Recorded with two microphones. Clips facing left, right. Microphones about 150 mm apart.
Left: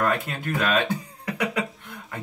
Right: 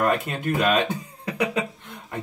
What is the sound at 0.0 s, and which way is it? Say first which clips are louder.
Speech: right 2 dB; 25° right (ahead or behind).